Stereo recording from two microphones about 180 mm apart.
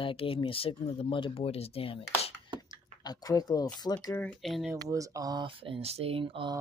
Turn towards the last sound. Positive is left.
turn(degrees=-30)  # may be behind; listen again after turning